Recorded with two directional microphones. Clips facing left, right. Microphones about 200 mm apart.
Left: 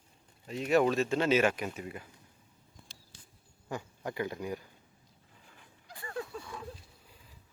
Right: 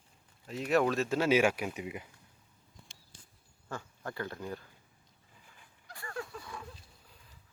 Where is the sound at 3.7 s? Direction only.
15° left (ahead or behind).